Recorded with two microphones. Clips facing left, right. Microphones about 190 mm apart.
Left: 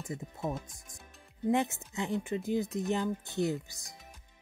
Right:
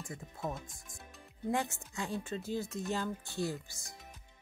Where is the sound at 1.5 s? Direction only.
20° left (ahead or behind).